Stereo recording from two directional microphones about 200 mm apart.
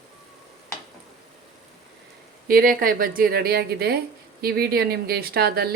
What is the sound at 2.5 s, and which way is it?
A woman's voice, 45° right (ahead or behind).